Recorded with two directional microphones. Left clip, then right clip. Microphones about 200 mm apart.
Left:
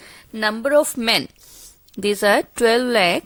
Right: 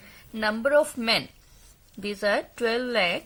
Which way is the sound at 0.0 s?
55° left (ahead or behind).